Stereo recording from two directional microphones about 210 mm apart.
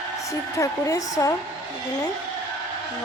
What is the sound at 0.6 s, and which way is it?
Speech, 15° left (ahead or behind).